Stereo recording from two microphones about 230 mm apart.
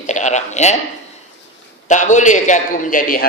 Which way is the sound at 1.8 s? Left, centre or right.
Left.